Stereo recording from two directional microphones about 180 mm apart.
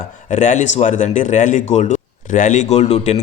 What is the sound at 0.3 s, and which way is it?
Speech, 45° left (ahead or behind).